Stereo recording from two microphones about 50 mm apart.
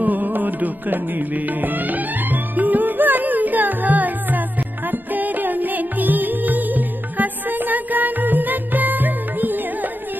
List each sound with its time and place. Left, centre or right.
0.0 s music: right